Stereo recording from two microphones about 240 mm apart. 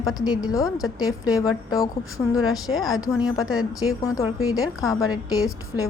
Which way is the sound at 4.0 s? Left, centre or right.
Centre.